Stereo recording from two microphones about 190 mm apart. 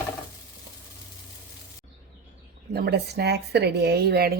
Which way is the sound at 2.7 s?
55° right (ahead or behind).